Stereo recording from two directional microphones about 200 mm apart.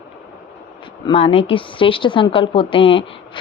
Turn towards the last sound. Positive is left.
turn(degrees=25)  # may be behind; listen again after turning